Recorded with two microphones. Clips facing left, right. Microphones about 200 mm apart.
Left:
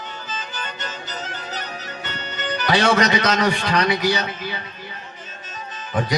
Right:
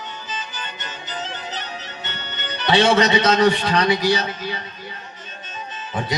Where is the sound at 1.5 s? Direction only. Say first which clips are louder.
Left 1 dB; 40° left (ahead or behind).